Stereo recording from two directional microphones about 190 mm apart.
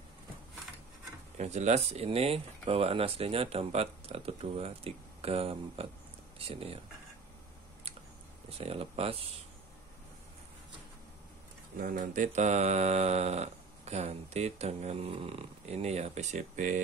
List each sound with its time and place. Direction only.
1.4 s mantra: 35° right (ahead or behind)
6.3 s speech: 30° right (ahead or behind)
8.5 s mantra: 30° right (ahead or behind)
11.7 s mantra: 45° right (ahead or behind)